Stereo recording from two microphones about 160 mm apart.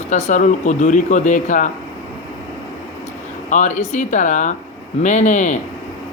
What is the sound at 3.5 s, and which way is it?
Speech, 45° left (ahead or behind).